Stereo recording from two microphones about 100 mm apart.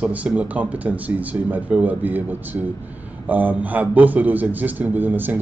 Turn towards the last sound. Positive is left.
turn(degrees=-20)  # may be behind; listen again after turning